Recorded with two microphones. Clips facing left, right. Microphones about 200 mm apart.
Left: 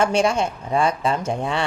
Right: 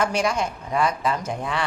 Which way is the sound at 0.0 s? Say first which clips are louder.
Left 4 dB; 25° left (ahead or behind).